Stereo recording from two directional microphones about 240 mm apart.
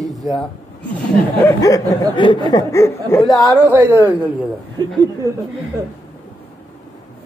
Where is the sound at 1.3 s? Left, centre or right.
Centre.